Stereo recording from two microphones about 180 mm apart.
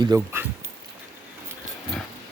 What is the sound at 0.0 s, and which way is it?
Speech, 20° right (ahead or behind).